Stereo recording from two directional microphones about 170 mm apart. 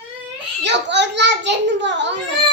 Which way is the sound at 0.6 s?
90° right.